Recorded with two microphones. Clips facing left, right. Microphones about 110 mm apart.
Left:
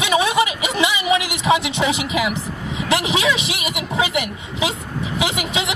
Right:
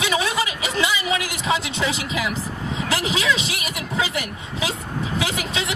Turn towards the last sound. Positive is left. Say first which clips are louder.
# left 3 dB
turn(degrees=20)  # may be behind; listen again after turning